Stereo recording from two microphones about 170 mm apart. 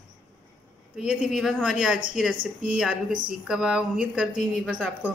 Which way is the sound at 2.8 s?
5° right (ahead or behind).